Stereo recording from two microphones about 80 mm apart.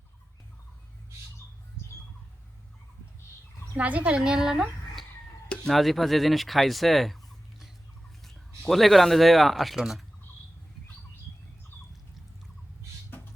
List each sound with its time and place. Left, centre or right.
3.8 s a woman's voice: centre
5.5 s turkey: centre
8.2 s speech: centre